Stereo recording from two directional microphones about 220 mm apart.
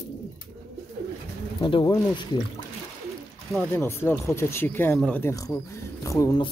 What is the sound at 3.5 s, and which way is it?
Speech, 10° left (ahead or behind).